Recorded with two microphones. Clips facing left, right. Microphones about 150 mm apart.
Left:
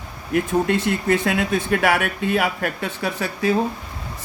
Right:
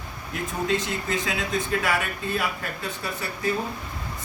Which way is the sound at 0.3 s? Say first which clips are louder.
Left 7 dB; 65° left (ahead or behind).